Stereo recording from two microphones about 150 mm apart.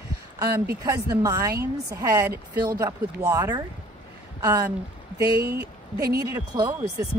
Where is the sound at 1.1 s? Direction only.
20° right (ahead or behind).